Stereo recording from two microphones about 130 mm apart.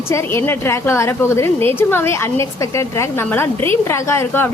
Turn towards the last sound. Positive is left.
turn(degrees=20)  # may be behind; listen again after turning